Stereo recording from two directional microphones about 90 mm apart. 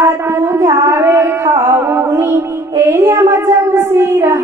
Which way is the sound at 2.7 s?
35° right (ahead or behind).